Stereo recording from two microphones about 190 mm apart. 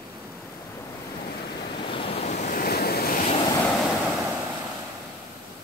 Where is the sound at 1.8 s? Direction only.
30° left (ahead or behind); by 3.2 s 55° left (ahead or behind).